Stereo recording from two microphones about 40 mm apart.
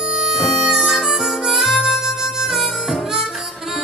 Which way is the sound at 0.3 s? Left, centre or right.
Centre.